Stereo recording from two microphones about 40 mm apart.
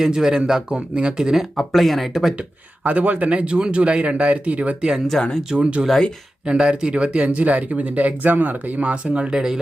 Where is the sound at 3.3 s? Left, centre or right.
Right.